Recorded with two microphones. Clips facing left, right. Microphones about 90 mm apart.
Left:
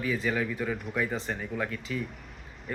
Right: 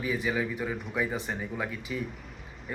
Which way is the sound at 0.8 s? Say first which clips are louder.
Even; centre (ahead or behind).